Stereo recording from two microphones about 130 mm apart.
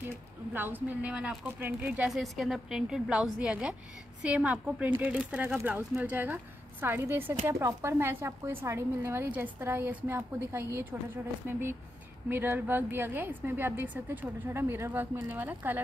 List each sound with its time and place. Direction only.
0.6 s speech: 15° right (ahead or behind)
2.0 s a woman's voice: centre (ahead or behind)